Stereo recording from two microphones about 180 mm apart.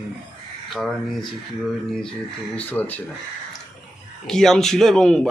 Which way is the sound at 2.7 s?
10° left (ahead or behind).